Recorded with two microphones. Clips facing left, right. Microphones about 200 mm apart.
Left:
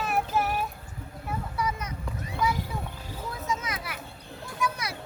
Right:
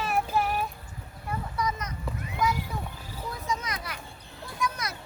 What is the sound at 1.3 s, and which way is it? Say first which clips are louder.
Vehicle: even; 5° left (ahead or behind).